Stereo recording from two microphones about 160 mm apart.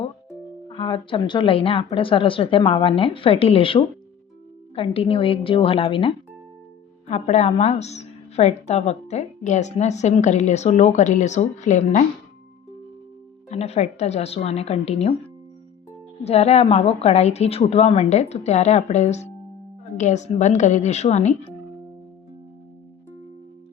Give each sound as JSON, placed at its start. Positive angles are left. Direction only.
{"t": 0.7, "sound": "a woman's voice", "side_deg": 30}
{"t": 7.1, "sound": "a woman's voice", "side_deg": 45}
{"t": 13.5, "sound": "a woman's voice", "side_deg": 40}
{"t": 16.2, "sound": "a woman's voice", "side_deg": 40}